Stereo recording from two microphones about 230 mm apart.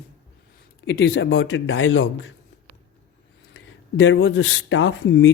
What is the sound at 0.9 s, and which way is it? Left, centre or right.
Speech, left.